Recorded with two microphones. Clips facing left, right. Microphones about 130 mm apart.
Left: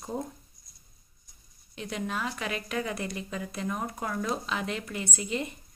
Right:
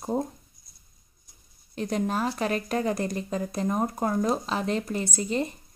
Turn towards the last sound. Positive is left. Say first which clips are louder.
# right 5 dB
turn(degrees=-35)  # may be behind; listen again after turning